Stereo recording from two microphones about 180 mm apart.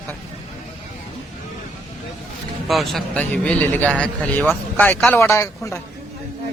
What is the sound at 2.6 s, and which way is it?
A man's voice, centre (ahead or behind).